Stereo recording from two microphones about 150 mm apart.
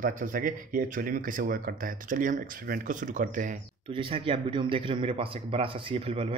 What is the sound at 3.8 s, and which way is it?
Speech, 35° right (ahead or behind).